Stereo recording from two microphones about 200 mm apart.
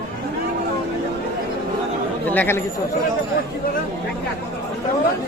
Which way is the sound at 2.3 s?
10° left (ahead or behind).